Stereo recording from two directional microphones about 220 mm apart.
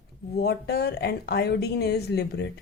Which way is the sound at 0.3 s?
45° left (ahead or behind).